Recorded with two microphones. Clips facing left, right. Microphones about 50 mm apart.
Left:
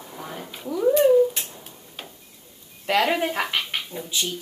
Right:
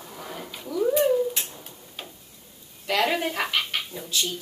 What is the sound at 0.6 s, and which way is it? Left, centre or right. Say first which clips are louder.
Speech: left 3 dB; centre.